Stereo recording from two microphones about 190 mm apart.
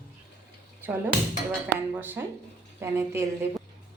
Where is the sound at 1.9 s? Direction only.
10° right (ahead or behind).